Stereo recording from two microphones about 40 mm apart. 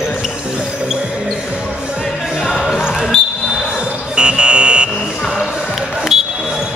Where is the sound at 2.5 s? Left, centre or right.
Centre.